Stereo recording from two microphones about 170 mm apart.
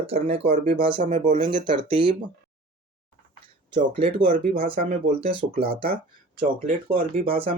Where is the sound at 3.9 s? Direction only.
30° right (ahead or behind).